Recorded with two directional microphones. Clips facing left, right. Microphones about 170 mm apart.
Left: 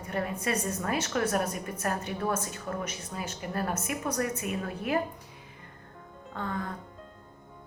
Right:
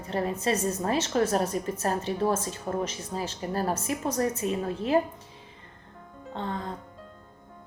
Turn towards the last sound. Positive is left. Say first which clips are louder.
# right 1 dB
turn(degrees=-25)  # may be behind; listen again after turning